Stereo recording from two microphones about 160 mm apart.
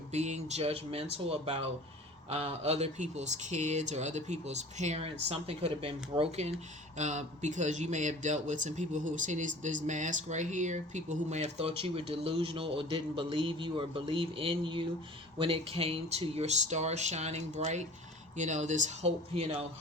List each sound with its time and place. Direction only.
0.1 s a man's voice: 45° right (ahead or behind)